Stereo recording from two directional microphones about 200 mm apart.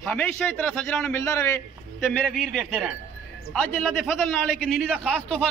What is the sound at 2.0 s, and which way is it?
A man's voice, centre (ahead or behind).